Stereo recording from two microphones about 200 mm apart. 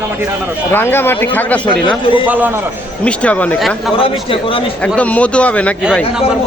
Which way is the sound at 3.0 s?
5° left (ahead or behind).